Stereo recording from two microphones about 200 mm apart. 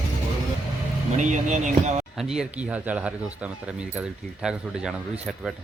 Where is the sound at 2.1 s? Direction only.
Centre (ahead or behind).